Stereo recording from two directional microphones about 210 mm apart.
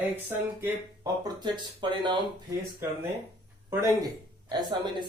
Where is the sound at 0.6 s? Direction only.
15° right (ahead or behind).